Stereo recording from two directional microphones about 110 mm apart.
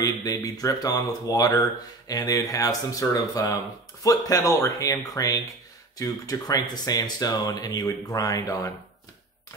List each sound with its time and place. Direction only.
0.0 s speech: 35° left (ahead or behind)